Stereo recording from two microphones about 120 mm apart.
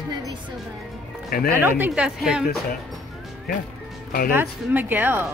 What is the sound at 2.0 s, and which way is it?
Speech, 5° right (ahead or behind).